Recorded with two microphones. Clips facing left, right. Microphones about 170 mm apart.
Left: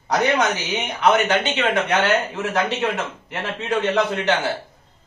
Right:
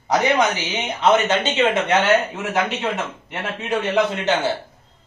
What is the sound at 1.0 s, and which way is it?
Speech, 25° right (ahead or behind).